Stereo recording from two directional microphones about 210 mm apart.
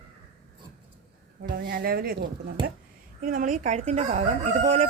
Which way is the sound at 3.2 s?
40° right (ahead or behind).